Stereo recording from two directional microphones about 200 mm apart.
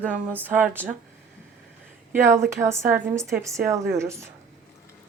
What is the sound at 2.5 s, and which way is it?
Speech, 15° right (ahead or behind).